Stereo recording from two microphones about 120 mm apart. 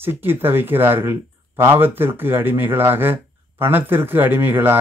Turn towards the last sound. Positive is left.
turn(degrees=-15)  # may be behind; listen again after turning